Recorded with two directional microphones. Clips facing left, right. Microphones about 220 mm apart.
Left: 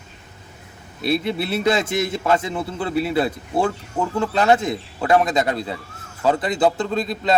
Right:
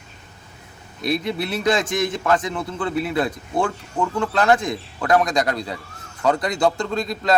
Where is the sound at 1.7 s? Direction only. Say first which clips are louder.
Even; 5° left (ahead or behind).